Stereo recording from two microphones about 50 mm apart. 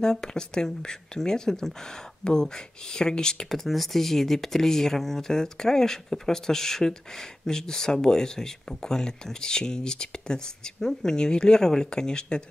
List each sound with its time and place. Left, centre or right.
0.0 s speech: centre